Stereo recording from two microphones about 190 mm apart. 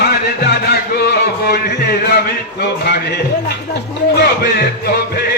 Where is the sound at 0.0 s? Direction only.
60° left (ahead or behind).